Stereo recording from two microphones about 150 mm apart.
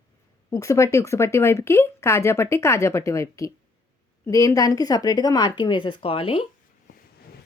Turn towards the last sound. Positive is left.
turn(degrees=40)  # may be behind; listen again after turning